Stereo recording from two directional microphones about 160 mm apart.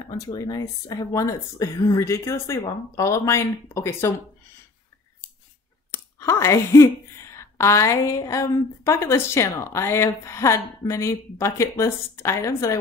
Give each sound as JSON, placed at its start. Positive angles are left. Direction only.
{"t": 0.1, "sound": "speech", "side_deg": 25}
{"t": 5.9, "sound": "speech", "side_deg": 15}